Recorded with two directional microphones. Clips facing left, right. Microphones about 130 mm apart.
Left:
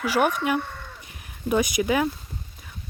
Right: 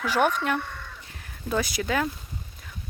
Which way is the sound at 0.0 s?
10° left (ahead or behind).